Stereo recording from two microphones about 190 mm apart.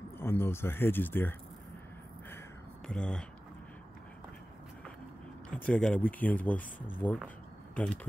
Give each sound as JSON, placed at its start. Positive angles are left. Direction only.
{"t": 0.2, "sound": "speech", "side_deg": 10}
{"t": 2.9, "sound": "speech", "side_deg": 5}
{"t": 5.5, "sound": "speech", "side_deg": 5}